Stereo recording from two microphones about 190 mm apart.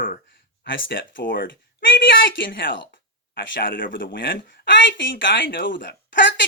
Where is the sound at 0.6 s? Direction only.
70° left (ahead or behind).